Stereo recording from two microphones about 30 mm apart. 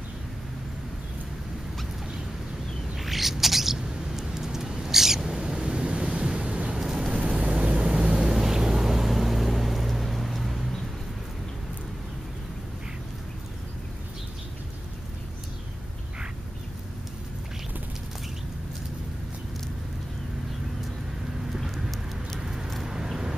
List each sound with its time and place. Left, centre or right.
3.0 s a sound: centre
5.3 s waves: right
6.8 s vehicle: right
7.2 s vehicle: right
8.0 s vehicle: right; by 10.6 s centre
22.4 s vehicle: centre